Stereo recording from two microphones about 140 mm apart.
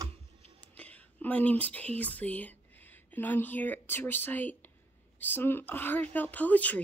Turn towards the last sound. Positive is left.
turn(degrees=10)  # may be behind; listen again after turning